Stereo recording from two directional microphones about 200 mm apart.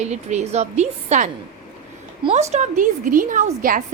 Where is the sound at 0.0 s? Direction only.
35° right (ahead or behind).